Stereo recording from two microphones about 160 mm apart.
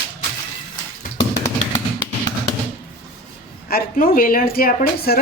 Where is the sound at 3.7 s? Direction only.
60° left (ahead or behind).